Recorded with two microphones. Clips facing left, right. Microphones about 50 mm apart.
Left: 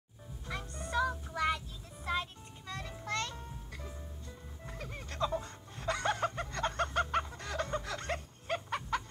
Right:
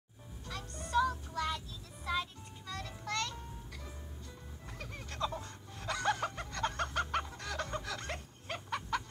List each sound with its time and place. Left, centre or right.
0.5 s music: left
4.7 s snicker: left